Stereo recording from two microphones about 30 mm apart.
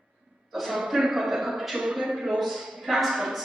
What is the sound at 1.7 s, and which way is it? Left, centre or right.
Speech, centre.